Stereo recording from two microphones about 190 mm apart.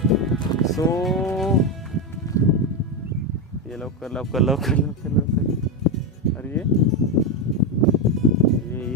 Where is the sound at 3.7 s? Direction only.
Centre (ahead or behind).